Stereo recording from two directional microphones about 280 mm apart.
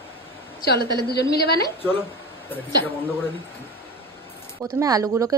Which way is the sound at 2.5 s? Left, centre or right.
Centre.